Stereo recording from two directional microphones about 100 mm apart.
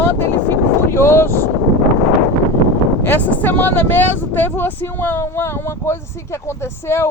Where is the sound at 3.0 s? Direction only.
20° left (ahead or behind).